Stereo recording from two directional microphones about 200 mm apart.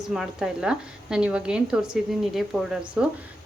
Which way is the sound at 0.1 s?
5° right (ahead or behind).